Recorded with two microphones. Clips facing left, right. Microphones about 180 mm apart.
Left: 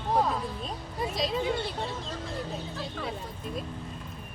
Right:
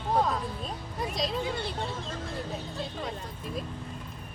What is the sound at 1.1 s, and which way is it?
Speech, centre (ahead or behind).